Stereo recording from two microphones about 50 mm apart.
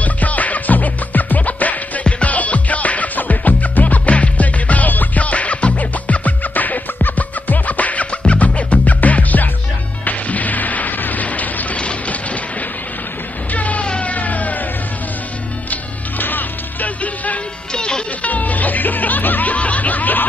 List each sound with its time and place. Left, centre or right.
0.0 s music: left
13.5 s music: left
13.8 s a sound: left
15.7 s music: left
17.7 s music: centre
18.2 s music: left